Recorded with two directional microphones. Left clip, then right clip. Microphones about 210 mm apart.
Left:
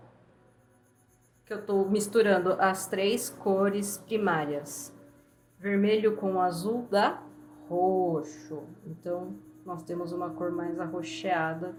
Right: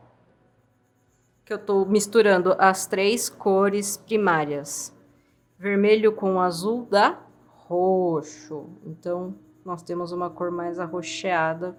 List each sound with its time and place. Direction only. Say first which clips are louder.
1.5 s a woman's voice: right 5 dB; 35° right (ahead or behind)